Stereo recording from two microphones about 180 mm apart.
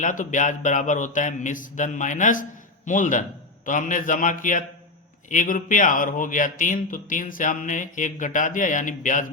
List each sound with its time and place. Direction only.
0.0 s a man's voice: 45° left (ahead or behind)